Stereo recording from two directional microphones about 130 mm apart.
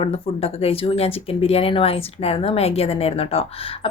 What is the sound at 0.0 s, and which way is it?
Speech, 50° left (ahead or behind).